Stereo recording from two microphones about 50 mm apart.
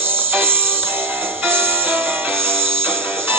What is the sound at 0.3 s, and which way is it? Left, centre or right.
Music, right.